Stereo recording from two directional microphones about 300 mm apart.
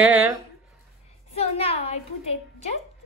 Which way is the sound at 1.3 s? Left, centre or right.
Centre.